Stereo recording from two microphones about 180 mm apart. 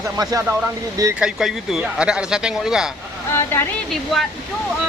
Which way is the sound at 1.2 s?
Centre (ahead or behind).